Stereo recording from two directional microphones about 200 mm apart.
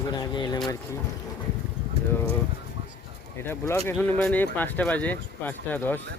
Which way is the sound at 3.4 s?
15° left (ahead or behind).